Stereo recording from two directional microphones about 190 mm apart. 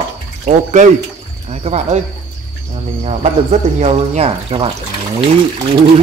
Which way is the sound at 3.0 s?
35° right (ahead or behind).